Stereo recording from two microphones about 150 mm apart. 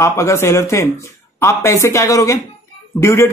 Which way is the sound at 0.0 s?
20° left (ahead or behind).